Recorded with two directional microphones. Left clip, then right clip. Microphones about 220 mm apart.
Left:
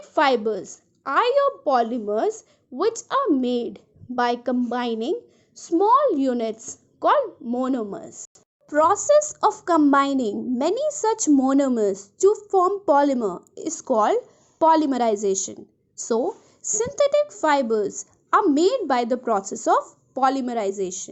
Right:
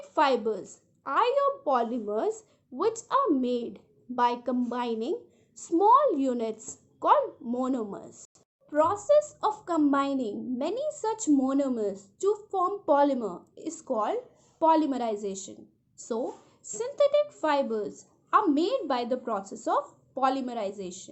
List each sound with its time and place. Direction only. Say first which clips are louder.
0.0 s a woman's voice: left 5 dB; 25° left (ahead or behind)
8.7 s a woman's voice: left 6 dB; 35° left (ahead or behind)